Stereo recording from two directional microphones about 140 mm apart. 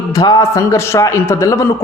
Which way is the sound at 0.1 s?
25° left (ahead or behind).